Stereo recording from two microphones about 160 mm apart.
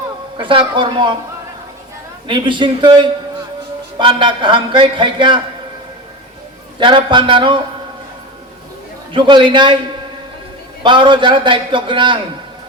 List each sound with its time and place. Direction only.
0.3 s speech: 30° right (ahead or behind)
2.2 s a man's voice: 30° right (ahead or behind)
6.7 s a man's voice: 30° right (ahead or behind)
9.1 s speech: 30° right (ahead or behind)
10.8 s a man's voice: 30° right (ahead or behind)